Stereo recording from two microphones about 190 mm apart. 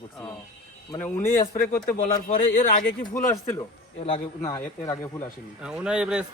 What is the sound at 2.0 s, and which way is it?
Speech, 45° left (ahead or behind).